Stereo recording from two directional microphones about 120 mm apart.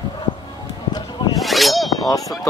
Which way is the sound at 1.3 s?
Centre (ahead or behind).